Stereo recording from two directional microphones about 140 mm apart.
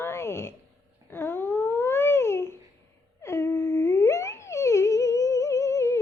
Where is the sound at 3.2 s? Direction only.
20° left (ahead or behind).